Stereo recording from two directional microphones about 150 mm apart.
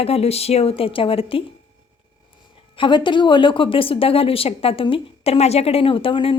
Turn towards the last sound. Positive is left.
turn(degrees=35)  # may be behind; listen again after turning